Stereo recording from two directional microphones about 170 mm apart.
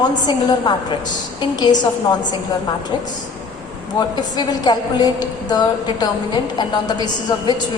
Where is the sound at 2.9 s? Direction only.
25° left (ahead or behind).